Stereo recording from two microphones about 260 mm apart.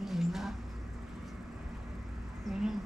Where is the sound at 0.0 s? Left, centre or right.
Centre.